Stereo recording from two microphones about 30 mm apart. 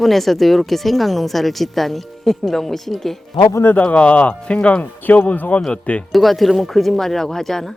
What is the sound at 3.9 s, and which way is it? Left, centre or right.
Speech, left.